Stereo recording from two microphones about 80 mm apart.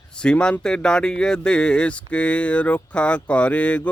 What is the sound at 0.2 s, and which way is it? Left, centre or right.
A man's voice, centre.